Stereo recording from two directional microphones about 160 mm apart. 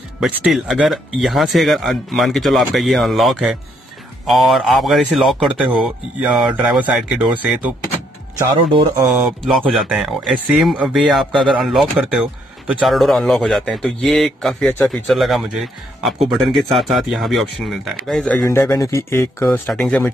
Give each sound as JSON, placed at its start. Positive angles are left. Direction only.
{"t": 0.2, "sound": "speech", "side_deg": 0}
{"t": 8.5, "sound": "speech", "side_deg": -30}
{"t": 9.2, "sound": "speech", "side_deg": 0}